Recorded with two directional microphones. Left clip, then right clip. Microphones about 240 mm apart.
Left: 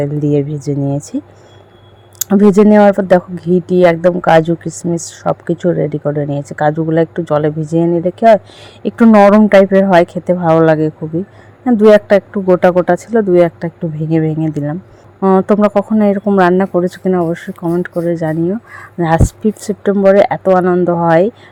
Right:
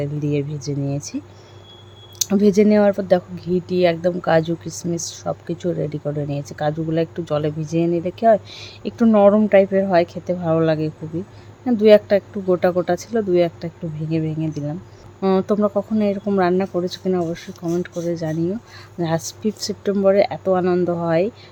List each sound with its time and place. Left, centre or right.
0.0 s speech: centre